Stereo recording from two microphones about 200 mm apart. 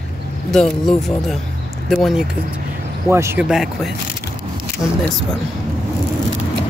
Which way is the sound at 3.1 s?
10° right (ahead or behind).